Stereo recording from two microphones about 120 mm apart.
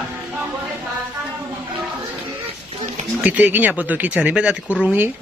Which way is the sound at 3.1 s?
10° right (ahead or behind).